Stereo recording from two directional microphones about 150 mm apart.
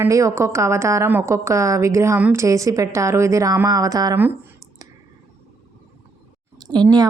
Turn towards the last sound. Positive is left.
turn(degrees=-25)  # may be behind; listen again after turning